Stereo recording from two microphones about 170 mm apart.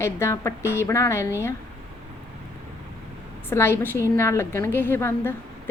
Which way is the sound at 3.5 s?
15° left (ahead or behind).